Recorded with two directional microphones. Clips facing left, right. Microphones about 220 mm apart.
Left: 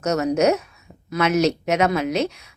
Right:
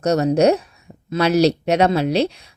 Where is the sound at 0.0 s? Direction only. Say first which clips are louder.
Right 3 dB; 35° right (ahead or behind).